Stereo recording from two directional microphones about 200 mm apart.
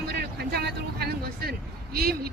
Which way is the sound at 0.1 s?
55° right (ahead or behind).